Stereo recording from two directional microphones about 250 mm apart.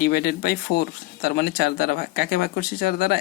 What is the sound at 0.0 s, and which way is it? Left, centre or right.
Speech, left.